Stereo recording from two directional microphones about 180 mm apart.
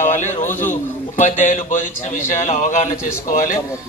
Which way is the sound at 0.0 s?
45° left (ahead or behind).